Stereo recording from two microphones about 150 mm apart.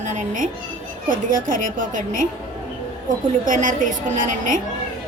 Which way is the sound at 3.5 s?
60° right (ahead or behind).